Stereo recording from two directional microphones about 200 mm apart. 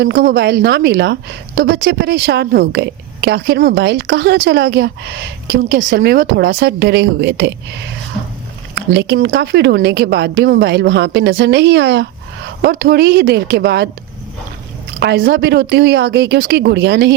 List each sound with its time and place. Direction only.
0.0 s a woman's voice: 55° right (ahead or behind)
8.7 s a woman's voice: 60° right (ahead or behind)
14.9 s a woman's voice: 60° right (ahead or behind)